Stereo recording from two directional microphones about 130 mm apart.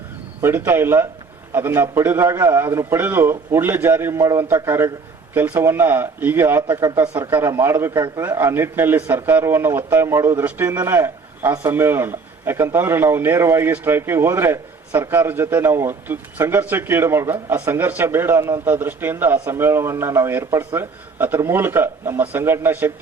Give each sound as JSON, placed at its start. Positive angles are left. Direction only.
{"t": 0.4, "sound": "a man's voice", "side_deg": -20}